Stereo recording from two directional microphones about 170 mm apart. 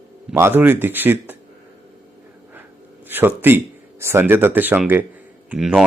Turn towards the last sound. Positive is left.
turn(degrees=-5)  # may be behind; listen again after turning